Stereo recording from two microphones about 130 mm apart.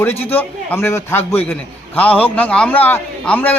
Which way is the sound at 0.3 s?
15° left (ahead or behind).